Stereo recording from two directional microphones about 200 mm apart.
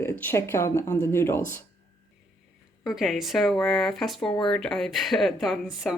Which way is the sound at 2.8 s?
Centre (ahead or behind).